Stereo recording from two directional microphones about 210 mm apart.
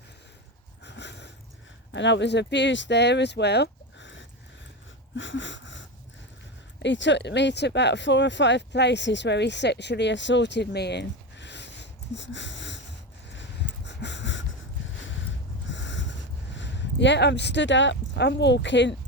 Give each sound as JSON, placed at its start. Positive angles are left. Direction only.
{"t": 0.9, "sound": "a sound", "side_deg": 55}
{"t": 1.9, "sound": "speech", "side_deg": 60}
{"t": 5.1, "sound": "wheeze", "side_deg": 60}
{"t": 6.8, "sound": "speech", "side_deg": 60}
{"t": 13.3, "sound": "a sound", "side_deg": 60}
{"t": 15.7, "sound": "snort", "side_deg": 60}
{"t": 16.6, "sound": "speech", "side_deg": 55}